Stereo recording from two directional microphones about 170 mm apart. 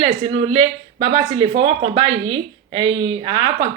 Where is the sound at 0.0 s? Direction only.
30° right (ahead or behind).